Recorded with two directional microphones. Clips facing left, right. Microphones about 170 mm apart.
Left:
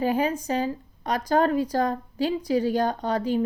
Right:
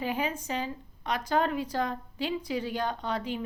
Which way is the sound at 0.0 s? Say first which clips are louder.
Left 7 dB; 40° left (ahead or behind).